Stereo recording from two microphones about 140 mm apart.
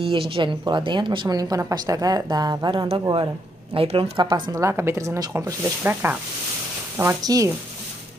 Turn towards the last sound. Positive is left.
turn(degrees=-25)  # may be behind; listen again after turning